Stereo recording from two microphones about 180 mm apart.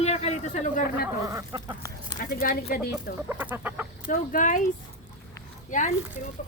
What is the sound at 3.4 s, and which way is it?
Chicken, 10° right (ahead or behind).